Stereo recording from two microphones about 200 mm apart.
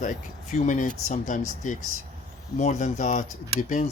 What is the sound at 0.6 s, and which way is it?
Speech, 40° left (ahead or behind).